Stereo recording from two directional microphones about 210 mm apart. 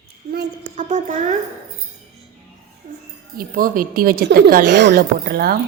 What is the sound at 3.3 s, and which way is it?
A woman's voice, 40° right (ahead or behind).